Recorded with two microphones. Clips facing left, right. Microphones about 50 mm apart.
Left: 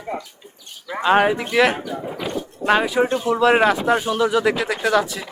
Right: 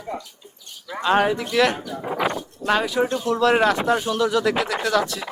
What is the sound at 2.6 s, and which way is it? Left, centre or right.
A man's voice, centre.